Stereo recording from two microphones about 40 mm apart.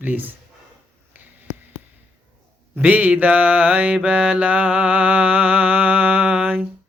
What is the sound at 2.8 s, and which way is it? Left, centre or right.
Mantra, right.